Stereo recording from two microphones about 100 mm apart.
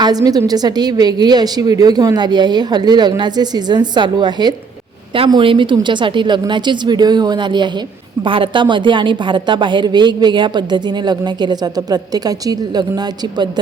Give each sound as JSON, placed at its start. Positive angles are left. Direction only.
{"t": 0.0, "sound": "a woman's voice", "side_deg": -40}
{"t": 5.4, "sound": "a woman's voice", "side_deg": -60}